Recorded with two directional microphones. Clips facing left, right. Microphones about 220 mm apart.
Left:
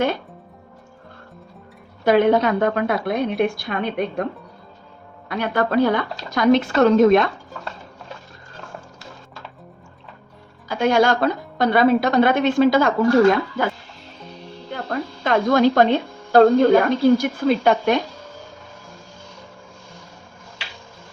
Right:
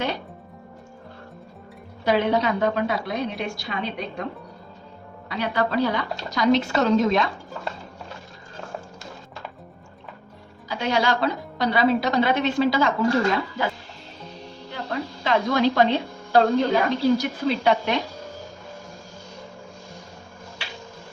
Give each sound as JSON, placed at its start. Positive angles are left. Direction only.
{"t": 2.0, "sound": "a woman's voice", "side_deg": 50}
{"t": 5.3, "sound": "a woman's voice", "side_deg": 50}
{"t": 10.7, "sound": "a woman's voice", "side_deg": 50}
{"t": 14.7, "sound": "speech", "side_deg": 50}